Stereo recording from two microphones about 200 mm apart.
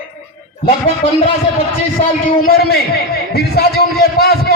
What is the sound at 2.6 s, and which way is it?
A man's voice, 50° left (ahead or behind).